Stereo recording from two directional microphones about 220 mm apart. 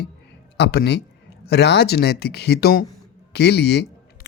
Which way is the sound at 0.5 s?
45° left (ahead or behind).